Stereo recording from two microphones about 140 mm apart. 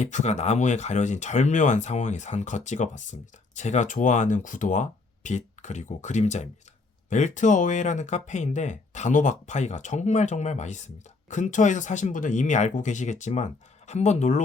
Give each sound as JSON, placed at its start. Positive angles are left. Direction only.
{"t": 0.0, "sound": "speech", "side_deg": 55}